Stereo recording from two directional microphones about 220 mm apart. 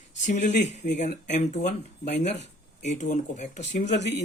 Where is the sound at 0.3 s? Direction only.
35° left (ahead or behind).